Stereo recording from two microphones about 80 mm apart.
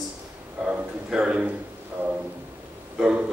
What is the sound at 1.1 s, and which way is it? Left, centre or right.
Speech, centre.